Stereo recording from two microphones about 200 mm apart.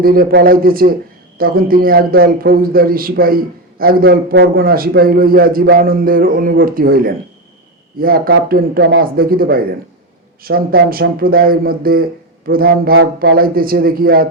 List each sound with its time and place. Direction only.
0.0 s a man's voice: 45° right (ahead or behind)